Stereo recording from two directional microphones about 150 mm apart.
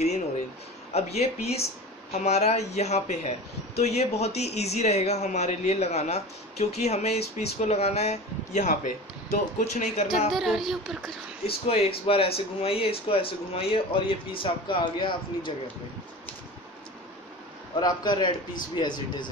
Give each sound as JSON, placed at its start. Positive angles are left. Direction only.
{"t": 0.9, "sound": "speech", "side_deg": 45}
{"t": 10.3, "sound": "speech", "side_deg": 0}
{"t": 11.7, "sound": "speech", "side_deg": 40}
{"t": 17.7, "sound": "a man's voice", "side_deg": 30}